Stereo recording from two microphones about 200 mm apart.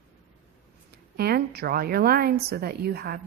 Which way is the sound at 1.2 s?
50° right (ahead or behind).